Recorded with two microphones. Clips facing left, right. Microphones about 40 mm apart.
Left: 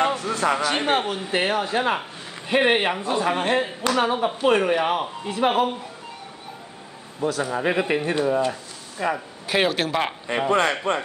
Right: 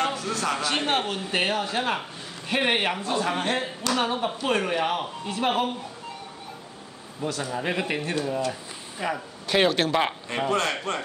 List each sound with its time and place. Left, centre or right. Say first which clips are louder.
0.0 s a man's voice: left 5 dB; centre
7.2 s a man's voice: left 5 dB; centre
8.0 s a man's voice: left 6 dB; left
9.0 s speech: left 4 dB; centre
10.5 s a man's voice: left 6 dB; left